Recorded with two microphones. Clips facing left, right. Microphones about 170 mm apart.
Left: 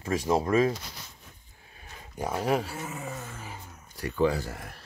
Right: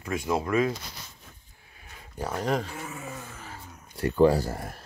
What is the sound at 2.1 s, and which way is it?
Speech, 10° left (ahead or behind).